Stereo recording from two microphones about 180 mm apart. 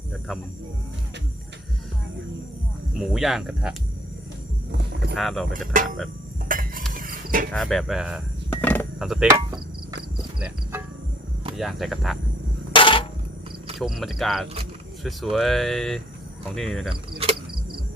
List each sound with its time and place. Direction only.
3.0 s speech: centre (ahead or behind)
5.1 s speech: centre (ahead or behind)
5.5 s speech: 45° right (ahead or behind)
6.5 s cutlery: 50° right (ahead or behind)
6.9 s a sound: 50° right (ahead or behind)
7.5 s speech: centre (ahead or behind)
8.4 s a sound: 10° left (ahead or behind)
9.0 s speech: centre (ahead or behind)
10.4 s cricket: 10° right (ahead or behind)
11.5 s speech: centre (ahead or behind)
12.7 s a sound: 30° left (ahead or behind)
13.7 s speech: centre (ahead or behind)
16.9 s cricket: 30° right (ahead or behind)